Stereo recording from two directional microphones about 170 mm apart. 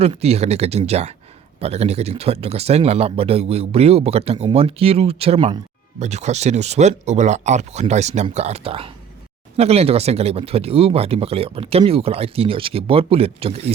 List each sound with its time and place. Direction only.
0.0 s speech: 35° right (ahead or behind)